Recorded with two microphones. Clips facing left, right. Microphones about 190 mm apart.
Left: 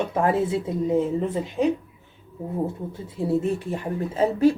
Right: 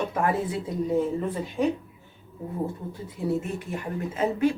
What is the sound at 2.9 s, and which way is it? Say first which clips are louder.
A woman's voice: left 3 dB; 30° left (ahead or behind).